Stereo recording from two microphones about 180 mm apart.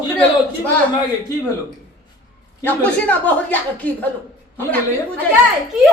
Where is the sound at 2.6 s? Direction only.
5° left (ahead or behind).